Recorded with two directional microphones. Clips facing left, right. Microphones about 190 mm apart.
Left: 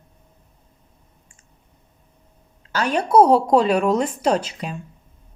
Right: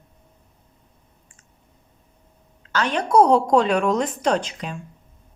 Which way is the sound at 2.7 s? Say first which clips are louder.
Left 2 dB; 10° left (ahead or behind).